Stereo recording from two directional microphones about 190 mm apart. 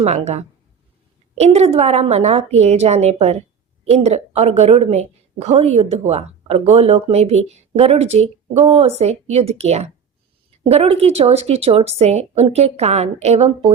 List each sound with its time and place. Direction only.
0.0 s a woman's voice: 35° right (ahead or behind)